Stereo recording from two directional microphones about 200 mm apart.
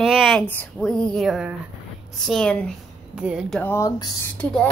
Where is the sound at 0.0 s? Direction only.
Centre (ahead or behind).